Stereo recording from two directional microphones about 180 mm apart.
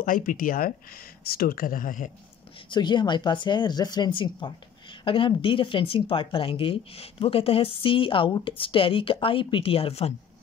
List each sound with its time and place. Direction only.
0.0 s speech: 50° left (ahead or behind)
2.7 s speech: 25° left (ahead or behind)